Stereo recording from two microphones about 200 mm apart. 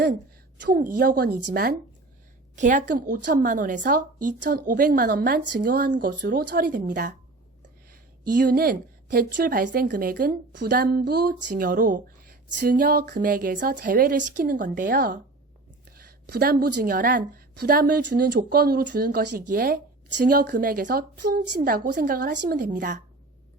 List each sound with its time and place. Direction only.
0.6 s a woman's voice: 45° right (ahead or behind)
2.6 s a woman's voice: 40° right (ahead or behind)
8.4 s a woman's voice: 45° right (ahead or behind)
16.0 s a woman's voice: 50° right (ahead or behind)